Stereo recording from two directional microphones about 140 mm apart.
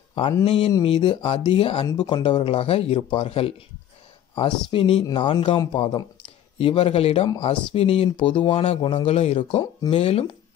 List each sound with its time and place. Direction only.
0.1 s speech: 35° left (ahead or behind)
1.9 s speech: 30° left (ahead or behind); by 10.3 s 45° left (ahead or behind)